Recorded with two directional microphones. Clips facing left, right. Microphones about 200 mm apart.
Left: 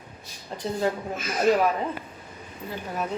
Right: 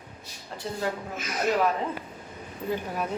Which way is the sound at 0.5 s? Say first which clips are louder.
Left 4 dB; 20° left (ahead or behind).